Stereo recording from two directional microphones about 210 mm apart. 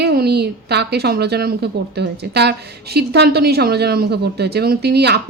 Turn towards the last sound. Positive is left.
turn(degrees=-50)  # may be behind; listen again after turning